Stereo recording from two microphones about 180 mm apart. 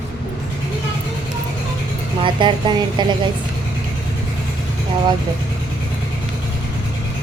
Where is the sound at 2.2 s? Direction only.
25° right (ahead or behind).